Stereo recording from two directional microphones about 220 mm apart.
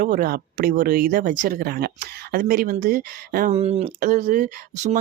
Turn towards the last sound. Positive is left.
turn(degrees=-35)  # may be behind; listen again after turning